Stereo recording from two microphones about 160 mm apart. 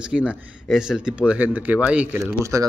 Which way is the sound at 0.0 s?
5° right (ahead or behind).